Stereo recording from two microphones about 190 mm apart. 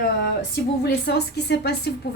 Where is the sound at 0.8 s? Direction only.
60° left (ahead or behind).